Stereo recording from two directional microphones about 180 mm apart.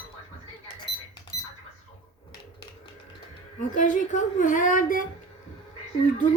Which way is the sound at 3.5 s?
45° left (ahead or behind).